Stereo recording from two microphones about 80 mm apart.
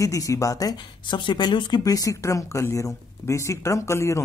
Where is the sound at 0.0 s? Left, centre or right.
Left.